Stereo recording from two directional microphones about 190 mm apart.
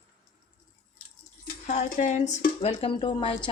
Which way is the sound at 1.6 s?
40° left (ahead or behind).